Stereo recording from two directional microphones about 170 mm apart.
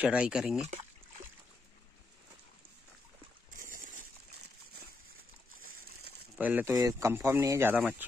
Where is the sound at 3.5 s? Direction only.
50° right (ahead or behind).